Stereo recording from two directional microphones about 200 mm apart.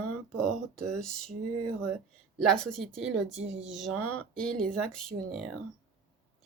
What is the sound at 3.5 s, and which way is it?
Speech, 70° right (ahead or behind).